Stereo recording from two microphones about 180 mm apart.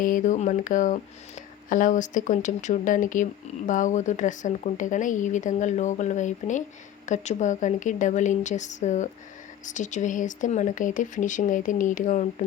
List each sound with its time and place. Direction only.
0.0 s speech: 45° left (ahead or behind)